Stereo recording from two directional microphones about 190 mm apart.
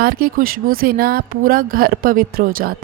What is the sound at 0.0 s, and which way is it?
Speech, 50° right (ahead or behind).